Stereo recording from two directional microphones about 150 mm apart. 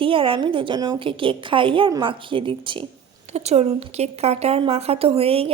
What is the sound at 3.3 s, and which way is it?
A woman's voice, 45° right (ahead or behind).